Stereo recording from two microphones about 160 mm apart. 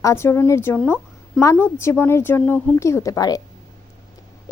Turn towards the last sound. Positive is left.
turn(degrees=25)  # may be behind; listen again after turning